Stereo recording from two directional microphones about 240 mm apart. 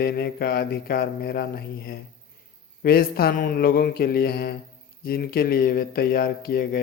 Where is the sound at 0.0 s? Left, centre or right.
Left.